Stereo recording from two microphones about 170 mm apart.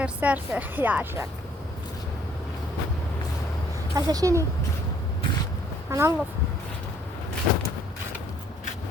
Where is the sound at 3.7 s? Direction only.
20° right (ahead or behind).